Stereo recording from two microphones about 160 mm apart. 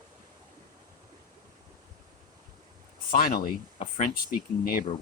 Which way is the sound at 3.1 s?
65° left (ahead or behind).